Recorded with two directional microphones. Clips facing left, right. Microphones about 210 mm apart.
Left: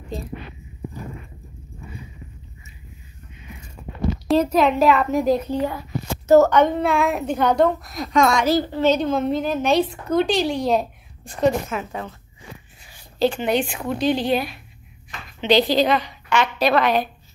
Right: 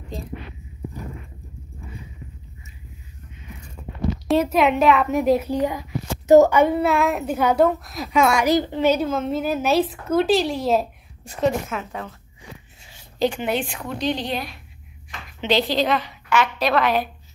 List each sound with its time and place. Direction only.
4.3 s speech: centre (ahead or behind)
12.8 s a sound: 20° right (ahead or behind)
13.4 s speech: 5° right (ahead or behind)